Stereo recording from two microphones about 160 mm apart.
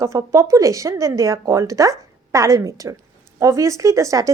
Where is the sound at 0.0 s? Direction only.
20° right (ahead or behind).